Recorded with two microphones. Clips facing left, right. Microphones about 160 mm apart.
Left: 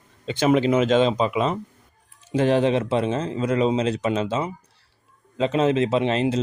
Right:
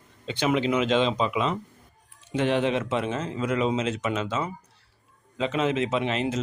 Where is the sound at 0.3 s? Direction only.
45° left (ahead or behind).